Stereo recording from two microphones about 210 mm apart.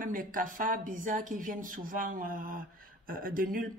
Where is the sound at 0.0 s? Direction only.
40° right (ahead or behind).